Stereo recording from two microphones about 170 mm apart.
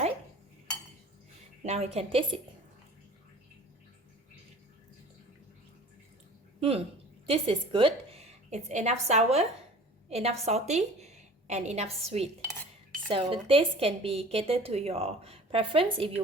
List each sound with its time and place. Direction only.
1.6 s a woman's voice: 40° right (ahead or behind)
6.6 s a woman's voice: 35° right (ahead or behind)
12.5 s cutlery: 10° left (ahead or behind)
13.1 s a woman's voice: 30° right (ahead or behind)